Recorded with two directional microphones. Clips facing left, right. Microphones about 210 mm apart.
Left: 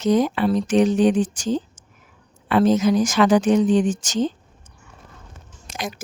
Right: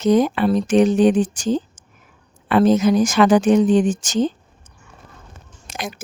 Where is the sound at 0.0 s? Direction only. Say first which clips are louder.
Right 3 dB; 55° right (ahead or behind).